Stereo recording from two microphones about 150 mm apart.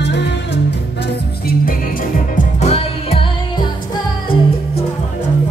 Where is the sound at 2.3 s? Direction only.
45° left (ahead or behind).